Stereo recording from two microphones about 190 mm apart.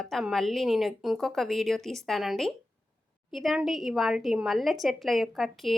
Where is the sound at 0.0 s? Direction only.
Centre (ahead or behind).